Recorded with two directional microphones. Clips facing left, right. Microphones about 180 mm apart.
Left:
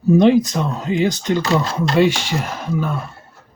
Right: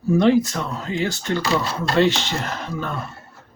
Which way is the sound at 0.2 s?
20° left (ahead or behind).